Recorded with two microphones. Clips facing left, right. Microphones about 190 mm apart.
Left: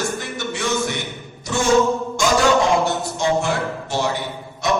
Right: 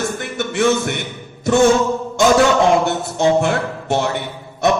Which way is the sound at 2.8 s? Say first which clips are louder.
Right 4 dB; 60° right (ahead or behind).